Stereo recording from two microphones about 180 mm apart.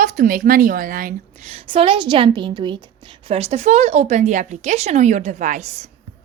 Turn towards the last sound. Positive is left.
turn(degrees=-45)  # may be behind; listen again after turning